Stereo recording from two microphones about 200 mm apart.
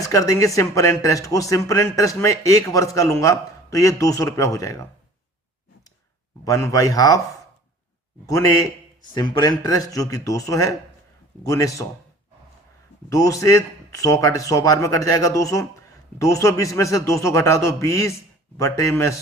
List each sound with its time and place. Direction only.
0.0 s a man's voice: 15° left (ahead or behind)
6.4 s a man's voice: 15° left (ahead or behind)
8.3 s a man's voice: 15° left (ahead or behind)
13.1 s a man's voice: 15° left (ahead or behind)